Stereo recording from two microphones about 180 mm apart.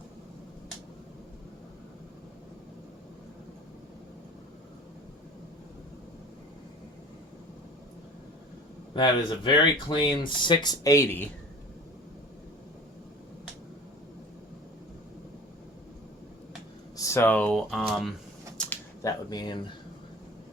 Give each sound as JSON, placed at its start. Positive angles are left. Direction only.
{"t": 8.9, "sound": "speech", "side_deg": 25}
{"t": 17.0, "sound": "speech", "side_deg": 15}
{"t": 19.0, "sound": "speech", "side_deg": 20}